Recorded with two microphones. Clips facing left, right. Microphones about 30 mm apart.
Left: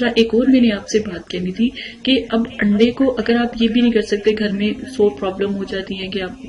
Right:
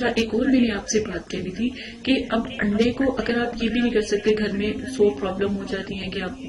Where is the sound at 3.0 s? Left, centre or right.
Left.